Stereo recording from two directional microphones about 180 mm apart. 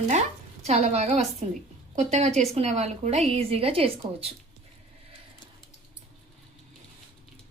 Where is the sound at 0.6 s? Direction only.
40° right (ahead or behind).